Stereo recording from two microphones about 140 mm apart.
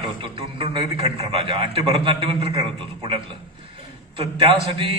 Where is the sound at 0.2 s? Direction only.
40° right (ahead or behind).